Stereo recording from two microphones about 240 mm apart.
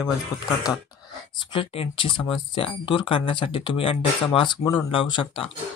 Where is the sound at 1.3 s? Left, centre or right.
Left.